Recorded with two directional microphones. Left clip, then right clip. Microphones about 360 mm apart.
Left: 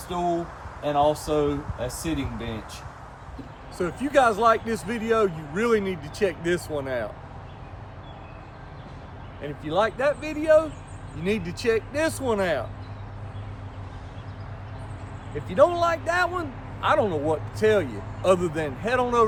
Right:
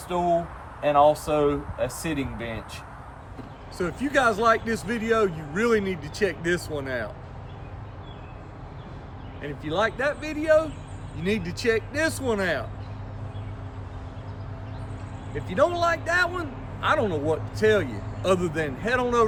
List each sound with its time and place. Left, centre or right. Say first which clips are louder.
0.8 s speech: right 3 dB; right
3.8 s a man's voice: left 3 dB; centre
9.4 s a man's voice: left 1 dB; centre
15.4 s a man's voice: left 2 dB; centre